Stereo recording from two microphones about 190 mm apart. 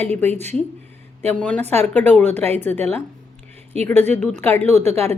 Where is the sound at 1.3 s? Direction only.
5° left (ahead or behind).